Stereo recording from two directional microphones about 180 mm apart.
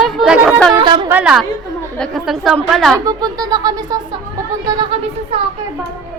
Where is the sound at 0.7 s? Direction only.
25° right (ahead or behind).